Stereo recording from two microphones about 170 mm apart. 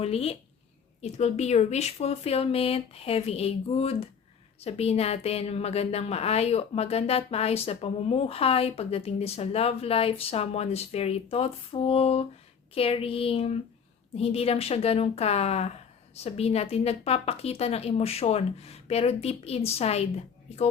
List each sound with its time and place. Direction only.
0.0 s a woman's voice: 35° left (ahead or behind)